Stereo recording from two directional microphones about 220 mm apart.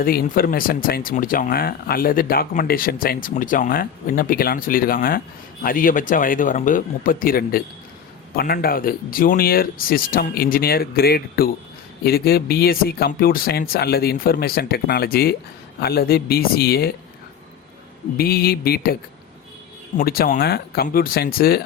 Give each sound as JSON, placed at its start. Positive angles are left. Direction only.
{"t": 0.0, "sound": "speech", "side_deg": 40}
{"t": 18.2, "sound": "speech", "side_deg": 45}
{"t": 20.0, "sound": "speech", "side_deg": 40}